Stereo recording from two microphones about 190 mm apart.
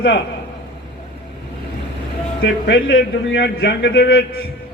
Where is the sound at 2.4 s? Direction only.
70° left (ahead or behind).